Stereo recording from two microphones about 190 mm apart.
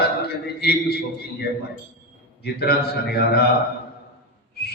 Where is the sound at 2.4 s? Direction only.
55° left (ahead or behind).